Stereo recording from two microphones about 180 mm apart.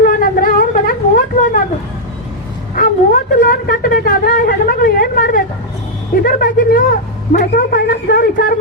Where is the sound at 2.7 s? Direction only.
50° left (ahead or behind).